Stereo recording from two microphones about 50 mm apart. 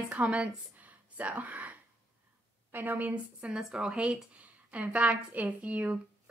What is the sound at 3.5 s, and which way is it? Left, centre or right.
Speech, centre.